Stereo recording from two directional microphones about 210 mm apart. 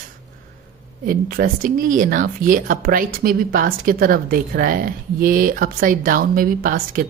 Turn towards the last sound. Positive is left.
turn(degrees=-40)  # may be behind; listen again after turning